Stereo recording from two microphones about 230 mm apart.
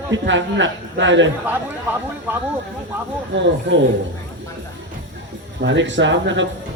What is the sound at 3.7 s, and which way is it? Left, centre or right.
Speech, right.